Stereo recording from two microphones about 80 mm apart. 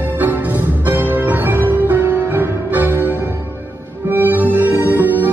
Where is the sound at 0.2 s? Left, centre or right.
Right.